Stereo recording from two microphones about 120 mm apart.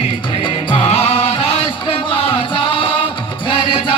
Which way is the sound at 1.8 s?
45° left (ahead or behind).